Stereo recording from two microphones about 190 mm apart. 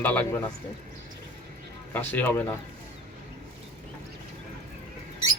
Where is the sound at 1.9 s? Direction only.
10° left (ahead or behind).